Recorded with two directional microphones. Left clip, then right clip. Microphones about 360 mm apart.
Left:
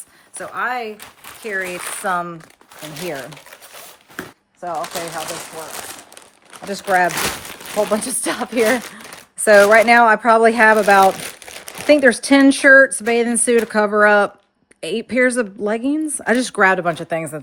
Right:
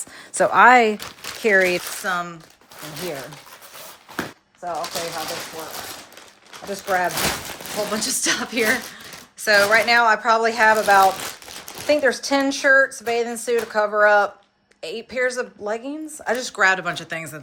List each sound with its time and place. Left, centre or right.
0.3 s speech: centre
2.0 s speech: centre
4.6 s speech: left
6.7 s speech: left
7.9 s speech: centre